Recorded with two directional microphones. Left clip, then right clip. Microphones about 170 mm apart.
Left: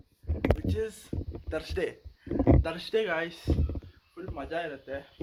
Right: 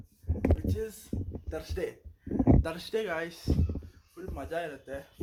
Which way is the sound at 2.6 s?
15° right (ahead or behind).